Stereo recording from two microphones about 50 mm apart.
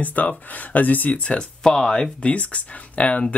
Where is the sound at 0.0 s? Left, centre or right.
Left.